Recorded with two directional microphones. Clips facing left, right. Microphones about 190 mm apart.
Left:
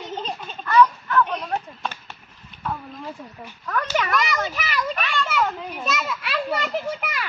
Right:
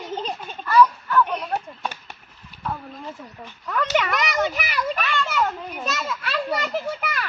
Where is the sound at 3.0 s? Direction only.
10° left (ahead or behind).